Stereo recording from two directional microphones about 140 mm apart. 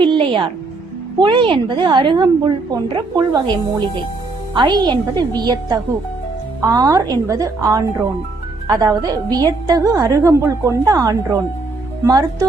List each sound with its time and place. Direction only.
0.0 s music: 35° right (ahead or behind)
1.2 s a woman's voice: 35° right (ahead or behind)